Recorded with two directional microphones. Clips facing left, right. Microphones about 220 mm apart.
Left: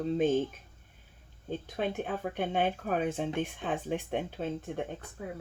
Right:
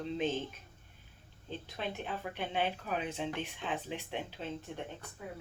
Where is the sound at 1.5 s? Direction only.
50° left (ahead or behind).